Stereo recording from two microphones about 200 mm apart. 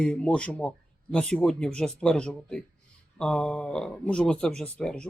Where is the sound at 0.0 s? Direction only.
5° left (ahead or behind).